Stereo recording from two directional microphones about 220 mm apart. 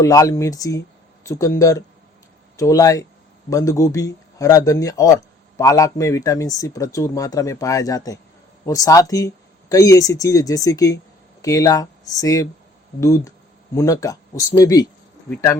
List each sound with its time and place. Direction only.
0.0 s speech: 15° left (ahead or behind)